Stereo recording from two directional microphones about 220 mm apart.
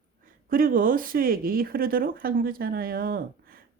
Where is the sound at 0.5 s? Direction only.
40° right (ahead or behind).